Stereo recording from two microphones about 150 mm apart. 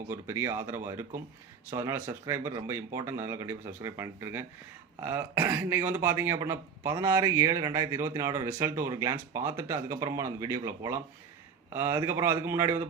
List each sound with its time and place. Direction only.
0.1 s speech: 15° right (ahead or behind)